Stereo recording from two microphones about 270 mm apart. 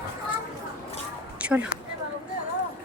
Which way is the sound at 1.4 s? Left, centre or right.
Centre.